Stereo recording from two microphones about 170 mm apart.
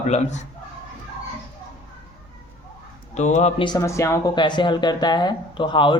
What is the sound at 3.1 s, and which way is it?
Speech, 45° left (ahead or behind).